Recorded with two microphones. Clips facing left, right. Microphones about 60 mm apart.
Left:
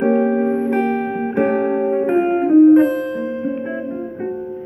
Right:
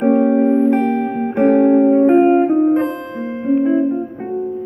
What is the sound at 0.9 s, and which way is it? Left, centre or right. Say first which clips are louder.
Music: right 1 dB; left.